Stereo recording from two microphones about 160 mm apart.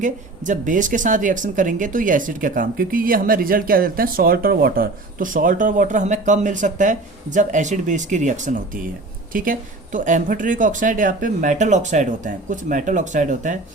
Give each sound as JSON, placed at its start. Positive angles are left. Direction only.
{"t": 0.0, "sound": "speech", "side_deg": -50}